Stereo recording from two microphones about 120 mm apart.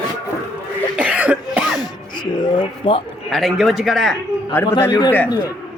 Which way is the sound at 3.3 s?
Centre (ahead or behind).